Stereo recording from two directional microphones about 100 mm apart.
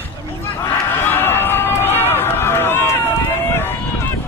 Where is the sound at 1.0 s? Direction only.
20° left (ahead or behind).